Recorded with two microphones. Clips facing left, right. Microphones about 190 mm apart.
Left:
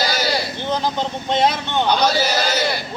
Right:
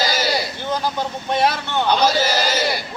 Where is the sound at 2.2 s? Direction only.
5° right (ahead or behind).